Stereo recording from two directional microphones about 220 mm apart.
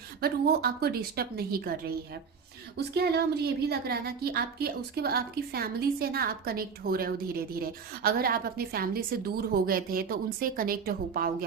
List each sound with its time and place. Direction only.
0.2 s a woman's voice: 45° right (ahead or behind)
2.7 s a woman's voice: 45° right (ahead or behind)